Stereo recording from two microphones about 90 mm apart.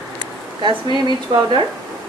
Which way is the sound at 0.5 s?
60° right (ahead or behind).